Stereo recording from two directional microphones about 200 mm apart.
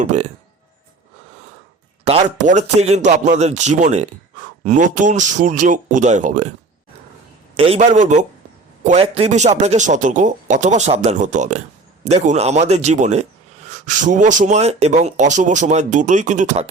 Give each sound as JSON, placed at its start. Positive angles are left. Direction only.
{"t": 0.0, "sound": "speech", "side_deg": -35}
{"t": 2.0, "sound": "speech", "side_deg": -35}
{"t": 7.5, "sound": "speech", "side_deg": -30}